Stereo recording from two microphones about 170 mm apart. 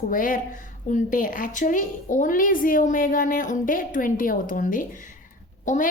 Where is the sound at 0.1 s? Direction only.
55° left (ahead or behind).